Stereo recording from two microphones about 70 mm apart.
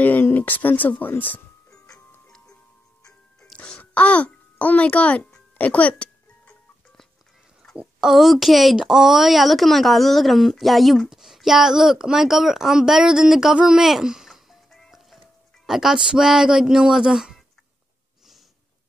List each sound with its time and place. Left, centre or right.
0.0 s speech: left
2.2 s music: centre
3.5 s a sound: centre
4.8 s music: centre
7.7 s speech: centre
13.6 s music: centre
15.6 s speech: centre